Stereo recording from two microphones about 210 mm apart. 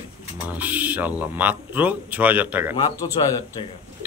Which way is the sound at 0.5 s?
5° right (ahead or behind).